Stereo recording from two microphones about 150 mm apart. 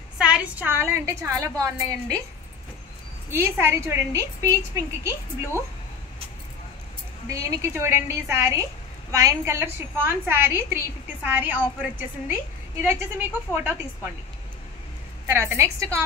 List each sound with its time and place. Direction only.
0.2 s a woman's voice: 5° right (ahead or behind)
3.3 s a woman's voice: 15° right (ahead or behind)
7.2 s a woman's voice: 20° right (ahead or behind)
13.6 s a woman's voice: 10° right (ahead or behind)
15.2 s a woman's voice: 15° right (ahead or behind)